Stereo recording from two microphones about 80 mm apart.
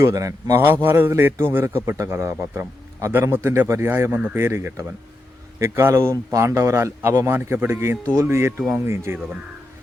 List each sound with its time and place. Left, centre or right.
0.0 s speech: right
0.8 s a man's voice: right